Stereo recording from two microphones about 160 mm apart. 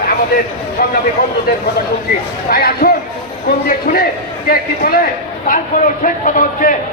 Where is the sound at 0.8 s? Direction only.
65° left (ahead or behind).